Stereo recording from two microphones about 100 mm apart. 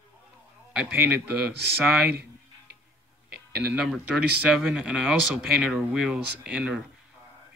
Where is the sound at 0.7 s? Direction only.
10° right (ahead or behind).